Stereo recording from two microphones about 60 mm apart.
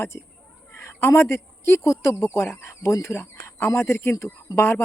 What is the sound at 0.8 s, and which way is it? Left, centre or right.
Speech, left.